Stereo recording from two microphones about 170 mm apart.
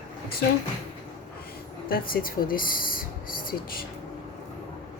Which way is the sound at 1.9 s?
60° left (ahead or behind).